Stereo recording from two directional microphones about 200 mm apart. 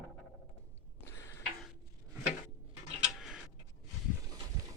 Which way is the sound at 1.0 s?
15° left (ahead or behind).